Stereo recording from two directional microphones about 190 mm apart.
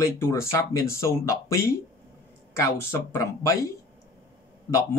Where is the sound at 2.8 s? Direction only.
15° left (ahead or behind).